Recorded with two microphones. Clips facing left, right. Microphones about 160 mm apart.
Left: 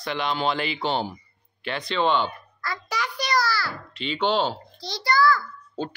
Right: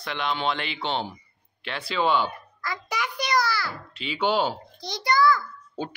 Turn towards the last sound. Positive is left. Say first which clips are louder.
# left 2 dB
turn(degrees=-20)  # may be behind; listen again after turning